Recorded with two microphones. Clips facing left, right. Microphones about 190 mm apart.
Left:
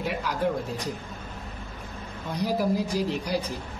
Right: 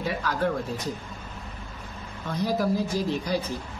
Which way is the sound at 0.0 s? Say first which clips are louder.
Even; 15° left (ahead or behind).